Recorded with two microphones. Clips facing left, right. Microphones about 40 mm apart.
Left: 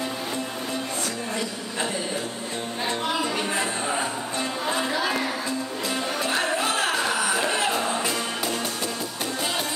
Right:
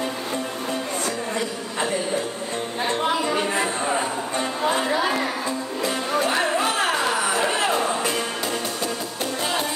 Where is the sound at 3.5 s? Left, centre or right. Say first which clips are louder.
Right 3 dB; centre.